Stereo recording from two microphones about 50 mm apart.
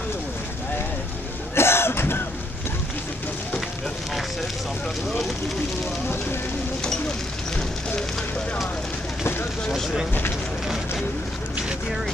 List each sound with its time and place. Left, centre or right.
1.5 s throat clearing: left